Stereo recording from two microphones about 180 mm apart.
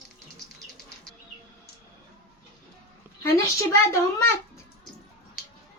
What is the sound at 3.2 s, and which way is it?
A child's voice, 15° left (ahead or behind).